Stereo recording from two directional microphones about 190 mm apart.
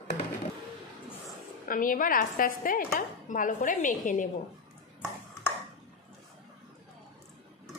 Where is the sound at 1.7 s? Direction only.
45° left (ahead or behind).